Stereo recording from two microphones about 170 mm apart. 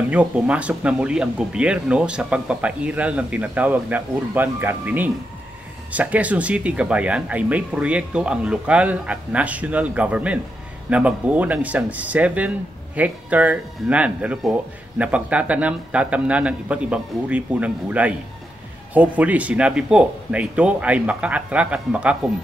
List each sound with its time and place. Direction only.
0.1 s speech: 5° right (ahead or behind)